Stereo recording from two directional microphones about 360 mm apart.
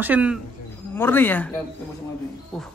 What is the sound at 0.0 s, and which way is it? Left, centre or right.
A man's voice, centre.